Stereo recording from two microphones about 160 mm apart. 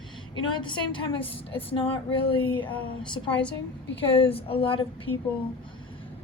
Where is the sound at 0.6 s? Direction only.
30° left (ahead or behind).